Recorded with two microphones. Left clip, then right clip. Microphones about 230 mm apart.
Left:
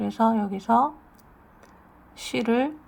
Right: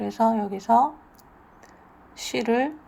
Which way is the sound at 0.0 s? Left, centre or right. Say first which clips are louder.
Right 1 dB; left.